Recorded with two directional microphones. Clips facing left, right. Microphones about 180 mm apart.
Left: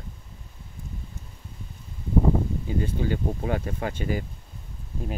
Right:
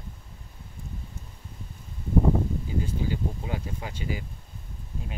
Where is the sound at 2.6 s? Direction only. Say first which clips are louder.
Left 3 dB; 60° left (ahead or behind).